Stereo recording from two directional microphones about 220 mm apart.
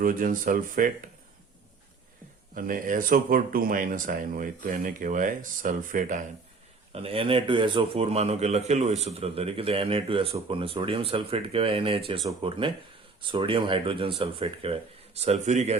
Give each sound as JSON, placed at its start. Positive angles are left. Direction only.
{"t": 0.0, "sound": "speech", "side_deg": -40}
{"t": 2.6, "sound": "speech", "side_deg": -40}
{"t": 6.9, "sound": "a man's voice", "side_deg": -25}